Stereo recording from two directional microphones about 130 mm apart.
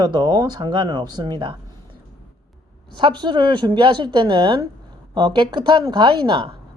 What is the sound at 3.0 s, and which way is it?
Speech, 35° right (ahead or behind).